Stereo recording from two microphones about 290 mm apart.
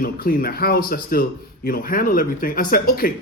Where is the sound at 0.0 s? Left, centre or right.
Left.